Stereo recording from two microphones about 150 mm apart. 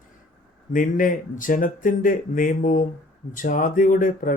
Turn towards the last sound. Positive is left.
turn(degrees=65)  # may be behind; listen again after turning